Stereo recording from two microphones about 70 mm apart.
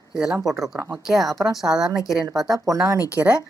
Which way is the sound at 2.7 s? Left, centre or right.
Right.